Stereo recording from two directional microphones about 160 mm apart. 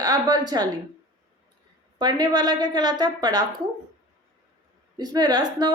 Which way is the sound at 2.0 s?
25° right (ahead or behind).